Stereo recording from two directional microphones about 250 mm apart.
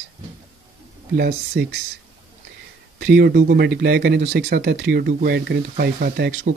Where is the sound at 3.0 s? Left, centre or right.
Right.